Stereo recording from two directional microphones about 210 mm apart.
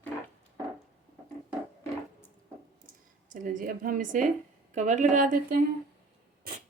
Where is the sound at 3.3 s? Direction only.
40° right (ahead or behind).